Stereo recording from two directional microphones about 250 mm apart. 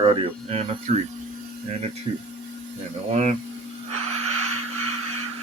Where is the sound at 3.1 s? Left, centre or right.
Right.